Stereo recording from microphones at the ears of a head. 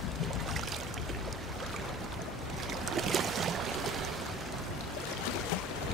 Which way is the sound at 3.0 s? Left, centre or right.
Right.